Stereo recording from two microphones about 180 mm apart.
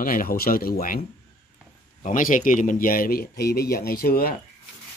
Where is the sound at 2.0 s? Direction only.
45° left (ahead or behind).